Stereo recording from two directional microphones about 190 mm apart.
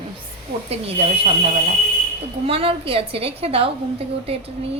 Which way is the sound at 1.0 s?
35° right (ahead or behind).